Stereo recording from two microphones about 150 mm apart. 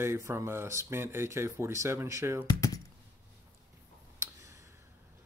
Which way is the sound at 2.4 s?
25° left (ahead or behind).